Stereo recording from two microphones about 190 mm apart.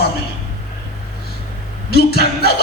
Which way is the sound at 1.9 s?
55° left (ahead or behind).